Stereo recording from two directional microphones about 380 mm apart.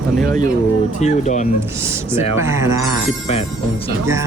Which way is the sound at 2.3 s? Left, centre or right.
Centre.